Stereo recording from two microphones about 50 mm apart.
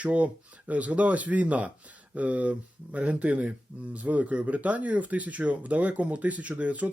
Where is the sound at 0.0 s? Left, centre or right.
Right.